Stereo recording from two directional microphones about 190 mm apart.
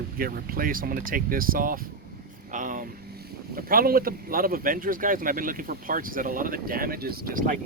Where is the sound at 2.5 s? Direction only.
45° right (ahead or behind).